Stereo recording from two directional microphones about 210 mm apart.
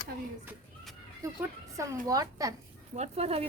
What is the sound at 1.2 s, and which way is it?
Speech, 15° right (ahead or behind).